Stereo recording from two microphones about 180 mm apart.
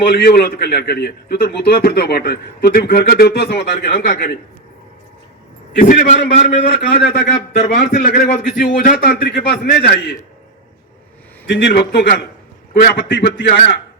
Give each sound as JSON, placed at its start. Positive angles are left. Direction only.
{"t": 0.1, "sound": "a man's voice", "side_deg": 55}
{"t": 5.7, "sound": "a man's voice", "side_deg": 45}
{"t": 6.6, "sound": "a man's voice", "side_deg": 70}
{"t": 7.3, "sound": "a man's voice", "side_deg": 45}
{"t": 11.4, "sound": "a man's voice", "side_deg": 75}